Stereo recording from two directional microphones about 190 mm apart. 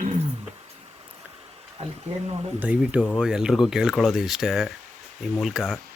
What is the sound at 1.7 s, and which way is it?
Speech, 35° right (ahead or behind).